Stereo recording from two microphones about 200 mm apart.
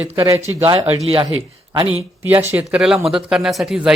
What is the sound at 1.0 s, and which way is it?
Speech, 25° right (ahead or behind).